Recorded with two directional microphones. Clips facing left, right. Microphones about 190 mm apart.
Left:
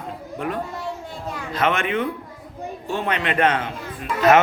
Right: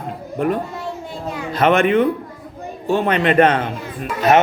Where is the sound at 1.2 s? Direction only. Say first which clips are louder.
Right 6 dB; 30° right (ahead or behind).